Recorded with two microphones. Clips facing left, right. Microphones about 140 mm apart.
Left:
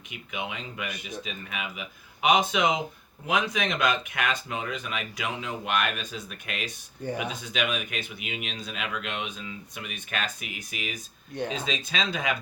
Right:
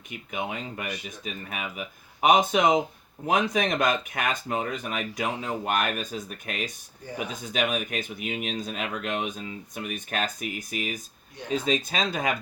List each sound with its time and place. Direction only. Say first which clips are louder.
0.3 s speech: right 3 dB; 40° right (ahead or behind)